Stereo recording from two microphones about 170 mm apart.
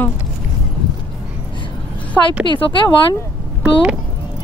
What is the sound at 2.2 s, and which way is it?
Speech, 15° left (ahead or behind).